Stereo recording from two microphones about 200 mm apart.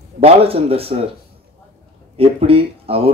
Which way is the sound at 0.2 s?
30° right (ahead or behind).